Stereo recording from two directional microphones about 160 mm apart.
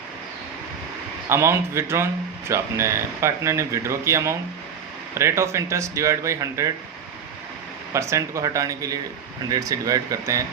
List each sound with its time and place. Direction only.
1.3 s speech: 15° right (ahead or behind)
7.9 s speech: 20° right (ahead or behind)